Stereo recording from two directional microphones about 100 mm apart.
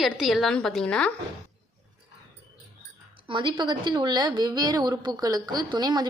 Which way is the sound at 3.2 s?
55° right (ahead or behind).